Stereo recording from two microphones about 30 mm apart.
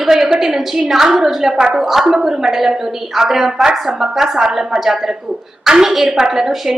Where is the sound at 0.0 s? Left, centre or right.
Centre.